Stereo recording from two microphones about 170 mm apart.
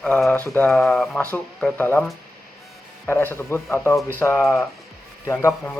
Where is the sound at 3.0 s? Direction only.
15° left (ahead or behind).